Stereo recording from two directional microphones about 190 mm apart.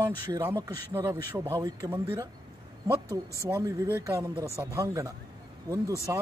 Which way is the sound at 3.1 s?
15° left (ahead or behind).